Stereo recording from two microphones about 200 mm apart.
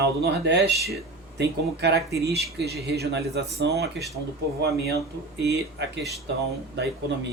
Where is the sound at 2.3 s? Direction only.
55° right (ahead or behind).